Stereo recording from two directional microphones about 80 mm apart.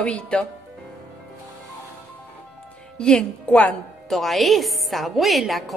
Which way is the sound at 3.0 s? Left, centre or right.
Centre.